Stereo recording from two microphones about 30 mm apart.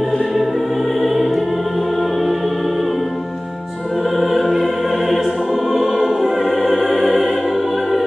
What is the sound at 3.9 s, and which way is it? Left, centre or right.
Music, centre.